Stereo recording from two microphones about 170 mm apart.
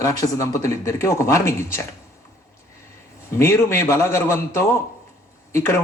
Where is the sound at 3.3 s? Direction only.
15° left (ahead or behind).